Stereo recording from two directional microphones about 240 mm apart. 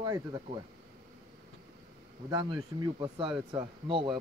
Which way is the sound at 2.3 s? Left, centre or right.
Centre.